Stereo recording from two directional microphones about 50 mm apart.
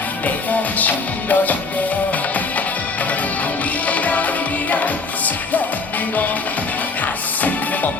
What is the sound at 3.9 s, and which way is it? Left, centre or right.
Music, left.